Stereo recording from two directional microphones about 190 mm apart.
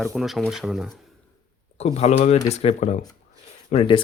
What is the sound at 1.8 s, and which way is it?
Speech, 35° left (ahead or behind).